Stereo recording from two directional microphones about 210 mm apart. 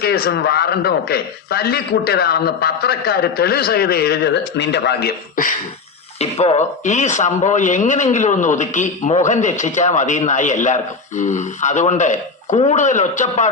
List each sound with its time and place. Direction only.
0.0 s a man's voice: 50° left (ahead or behind)
6.1 s a man's voice: 30° left (ahead or behind)